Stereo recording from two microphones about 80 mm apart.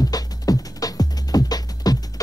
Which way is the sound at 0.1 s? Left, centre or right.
Left.